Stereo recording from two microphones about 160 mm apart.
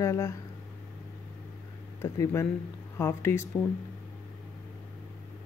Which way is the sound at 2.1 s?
20° left (ahead or behind).